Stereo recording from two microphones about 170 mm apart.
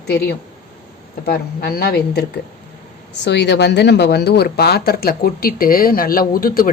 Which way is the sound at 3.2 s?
90° left.